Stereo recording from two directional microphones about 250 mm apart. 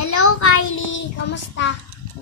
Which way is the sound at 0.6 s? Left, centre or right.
Left.